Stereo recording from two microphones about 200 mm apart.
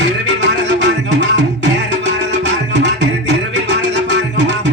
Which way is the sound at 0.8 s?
65° right (ahead or behind).